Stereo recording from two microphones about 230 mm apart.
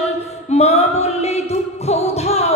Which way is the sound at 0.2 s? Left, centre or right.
Left.